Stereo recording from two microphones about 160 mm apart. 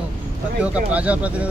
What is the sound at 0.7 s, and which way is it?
Speech, 10° right (ahead or behind).